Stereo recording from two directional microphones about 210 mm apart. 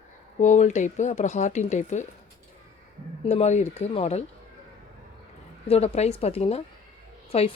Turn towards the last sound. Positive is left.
turn(degrees=30)  # may be behind; listen again after turning